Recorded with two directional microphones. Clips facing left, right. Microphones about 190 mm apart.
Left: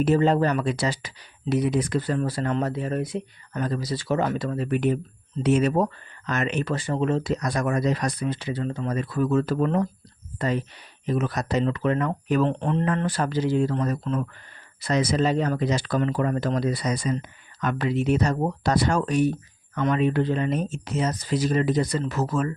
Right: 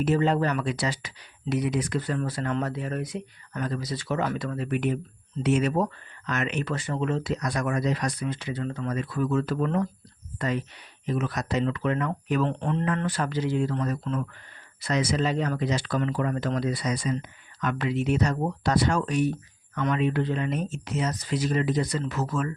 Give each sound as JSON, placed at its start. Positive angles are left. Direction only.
{"t": 0.0, "sound": "speech", "side_deg": 35}